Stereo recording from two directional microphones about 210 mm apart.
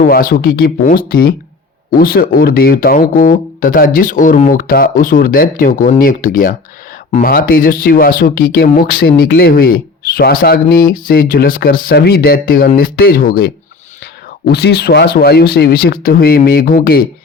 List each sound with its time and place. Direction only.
0.0 s speech: 40° left (ahead or behind)